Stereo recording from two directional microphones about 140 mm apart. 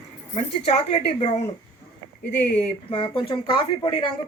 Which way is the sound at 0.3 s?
50° left (ahead or behind).